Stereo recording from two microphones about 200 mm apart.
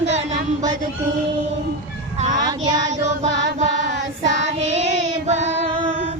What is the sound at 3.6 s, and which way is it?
Child singing, 35° right (ahead or behind).